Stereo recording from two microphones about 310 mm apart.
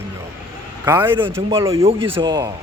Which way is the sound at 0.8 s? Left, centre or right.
Centre.